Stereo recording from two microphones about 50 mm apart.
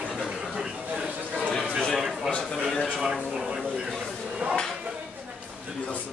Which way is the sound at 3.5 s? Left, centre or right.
Centre.